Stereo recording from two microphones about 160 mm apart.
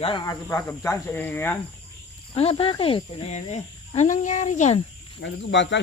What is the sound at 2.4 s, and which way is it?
Speech, 40° left (ahead or behind).